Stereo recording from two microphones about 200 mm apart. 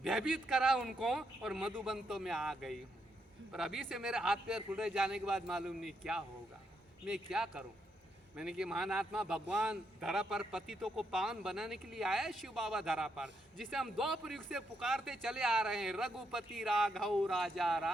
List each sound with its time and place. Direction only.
0.0 s a man's voice: centre (ahead or behind)